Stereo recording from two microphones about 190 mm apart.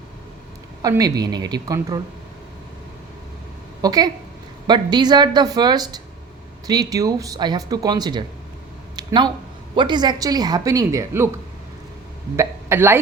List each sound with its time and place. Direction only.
0.8 s speech: 20° right (ahead or behind)
3.8 s a woman's voice: 20° right (ahead or behind)
9.0 s a sound: 25° right (ahead or behind)
9.7 s speech: 25° right (ahead or behind)
12.4 s speech: 15° right (ahead or behind)